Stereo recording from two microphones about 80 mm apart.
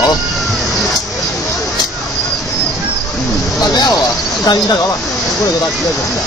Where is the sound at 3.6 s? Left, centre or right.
Left.